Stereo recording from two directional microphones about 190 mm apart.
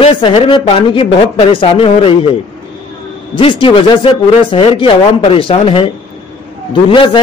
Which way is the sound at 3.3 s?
25° left (ahead or behind).